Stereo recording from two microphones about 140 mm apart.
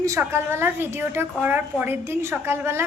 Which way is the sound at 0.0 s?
20° right (ahead or behind).